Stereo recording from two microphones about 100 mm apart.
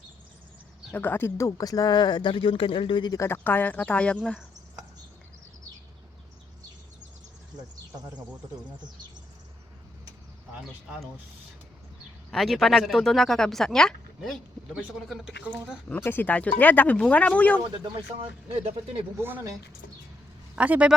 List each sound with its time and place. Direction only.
0.9 s speech: 20° left (ahead or behind); by 3.1 s 60° left (ahead or behind)
3.1 s speech: 25° left (ahead or behind)
12.3 s speech: 5° left (ahead or behind)
16.0 s speech: 15° left (ahead or behind)
17.6 s speech: 60° right (ahead or behind)
19.1 s speech: 25° right (ahead or behind)
20.6 s a man's voice: 15° right (ahead or behind)